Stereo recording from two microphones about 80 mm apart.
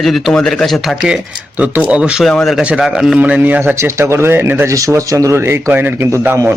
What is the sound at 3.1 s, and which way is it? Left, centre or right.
Speech, centre.